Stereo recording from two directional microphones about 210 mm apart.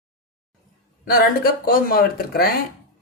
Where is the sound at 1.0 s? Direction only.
45° left (ahead or behind).